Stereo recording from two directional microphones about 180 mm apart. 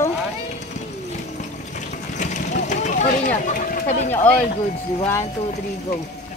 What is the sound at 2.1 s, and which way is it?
Vehicle, 45° left (ahead or behind).